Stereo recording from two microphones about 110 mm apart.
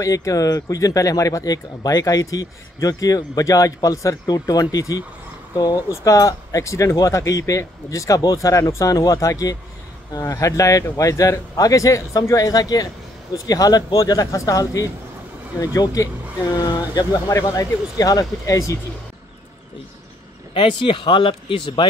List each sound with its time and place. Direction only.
0.0 s speech: 30° left (ahead or behind)
20.5 s speech: 50° left (ahead or behind)